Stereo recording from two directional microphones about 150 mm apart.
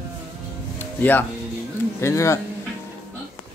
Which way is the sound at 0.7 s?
10° left (ahead or behind).